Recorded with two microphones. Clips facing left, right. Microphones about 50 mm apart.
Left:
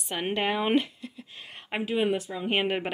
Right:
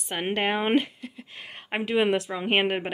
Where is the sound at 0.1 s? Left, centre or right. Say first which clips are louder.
Right 2 dB; right.